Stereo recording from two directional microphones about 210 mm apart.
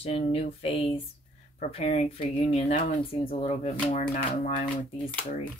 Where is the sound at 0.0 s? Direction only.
30° left (ahead or behind).